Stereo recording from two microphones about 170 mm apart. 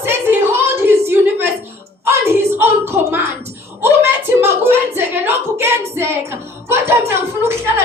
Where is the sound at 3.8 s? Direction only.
15° right (ahead or behind).